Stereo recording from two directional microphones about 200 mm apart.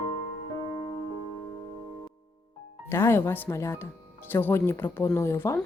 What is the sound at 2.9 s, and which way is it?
Speech, 15° left (ahead or behind).